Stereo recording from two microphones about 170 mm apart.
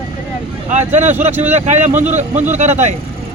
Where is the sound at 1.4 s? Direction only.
40° right (ahead or behind).